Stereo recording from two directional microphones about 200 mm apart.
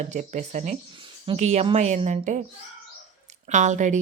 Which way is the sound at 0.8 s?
25° right (ahead or behind).